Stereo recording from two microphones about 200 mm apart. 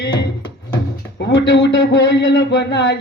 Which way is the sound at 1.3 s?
60° left (ahead or behind).